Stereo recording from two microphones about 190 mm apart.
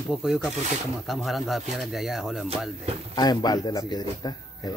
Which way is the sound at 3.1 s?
20° left (ahead or behind).